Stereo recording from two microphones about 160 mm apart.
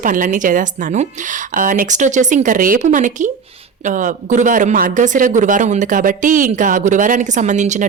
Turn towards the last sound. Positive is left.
turn(degrees=-50)  # may be behind; listen again after turning